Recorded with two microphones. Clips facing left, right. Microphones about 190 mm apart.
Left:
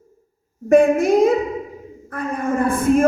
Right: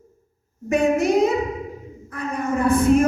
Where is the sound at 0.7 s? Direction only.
50° left (ahead or behind).